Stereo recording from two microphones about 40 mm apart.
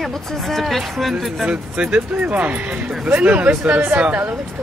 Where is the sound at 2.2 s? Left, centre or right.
Right.